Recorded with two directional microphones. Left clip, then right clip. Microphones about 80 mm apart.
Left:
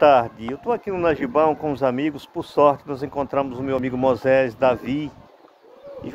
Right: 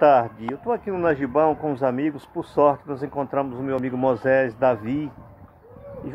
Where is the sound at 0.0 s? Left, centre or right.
Left.